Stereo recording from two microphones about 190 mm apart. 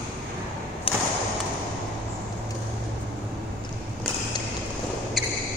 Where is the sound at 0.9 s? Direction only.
30° left (ahead or behind).